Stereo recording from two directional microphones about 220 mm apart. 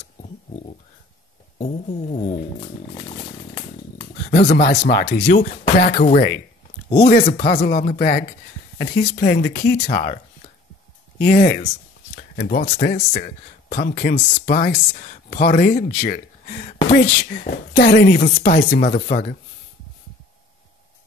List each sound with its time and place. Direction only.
1.6 s speech: 30° left (ahead or behind)
4.5 s speech: 35° left (ahead or behind)
7.0 s a woman's voice: 45° left (ahead or behind)
9.9 s a woman's voice: 30° left (ahead or behind)